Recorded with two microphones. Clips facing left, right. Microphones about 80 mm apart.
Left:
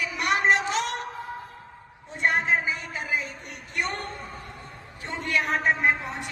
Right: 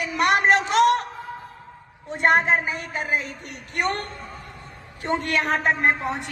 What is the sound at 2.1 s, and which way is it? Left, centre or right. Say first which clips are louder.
A woman's voice: right 5 dB; right.